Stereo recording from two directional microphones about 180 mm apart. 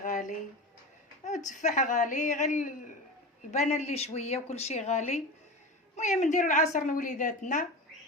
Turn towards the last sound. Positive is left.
turn(degrees=45)  # may be behind; listen again after turning